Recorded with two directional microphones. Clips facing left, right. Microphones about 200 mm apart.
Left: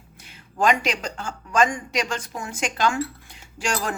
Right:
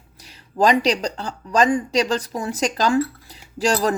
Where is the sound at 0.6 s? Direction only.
35° right (ahead or behind).